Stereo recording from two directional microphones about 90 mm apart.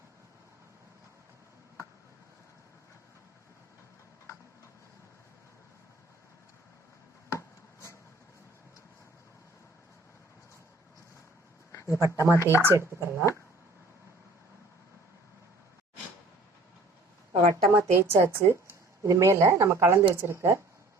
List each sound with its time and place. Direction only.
7.3 s chopping: 35° left (ahead or behind)
11.7 s a sound: 35° left (ahead or behind)
11.9 s speech: 35° right (ahead or behind)
12.4 s speech: 35° left (ahead or behind)
12.6 s speech: 30° right (ahead or behind)
17.5 s a woman's voice: 30° right (ahead or behind)